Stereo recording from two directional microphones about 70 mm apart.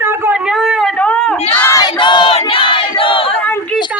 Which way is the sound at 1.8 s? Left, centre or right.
Left.